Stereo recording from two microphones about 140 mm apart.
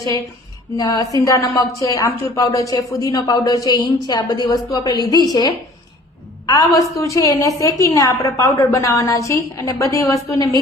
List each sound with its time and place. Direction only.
0.8 s a woman's voice: 25° left (ahead or behind)